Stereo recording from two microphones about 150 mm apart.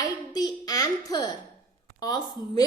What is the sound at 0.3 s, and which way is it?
A woman's voice, 25° left (ahead or behind).